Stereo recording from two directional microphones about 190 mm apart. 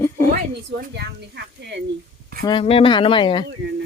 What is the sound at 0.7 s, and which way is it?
Speech, 55° right (ahead or behind).